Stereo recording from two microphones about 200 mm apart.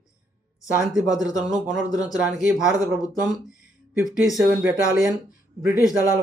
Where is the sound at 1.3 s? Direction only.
Centre (ahead or behind).